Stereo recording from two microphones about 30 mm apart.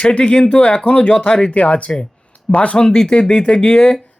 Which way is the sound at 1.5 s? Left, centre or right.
Left.